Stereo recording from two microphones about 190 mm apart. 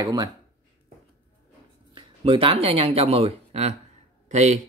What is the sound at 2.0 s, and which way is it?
A man's voice, 30° right (ahead or behind).